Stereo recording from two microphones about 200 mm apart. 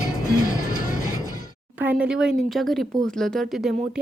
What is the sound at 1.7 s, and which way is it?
A woman's voice, 5° right (ahead or behind).